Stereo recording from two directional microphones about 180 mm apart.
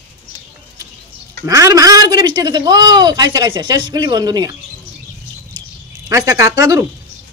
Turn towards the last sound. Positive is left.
turn(degrees=-20)  # may be behind; listen again after turning